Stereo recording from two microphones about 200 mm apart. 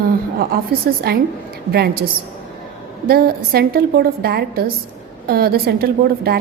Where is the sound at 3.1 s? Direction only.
50° right (ahead or behind).